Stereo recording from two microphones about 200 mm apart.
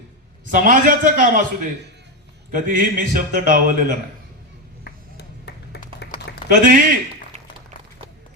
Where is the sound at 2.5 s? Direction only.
45° right (ahead or behind).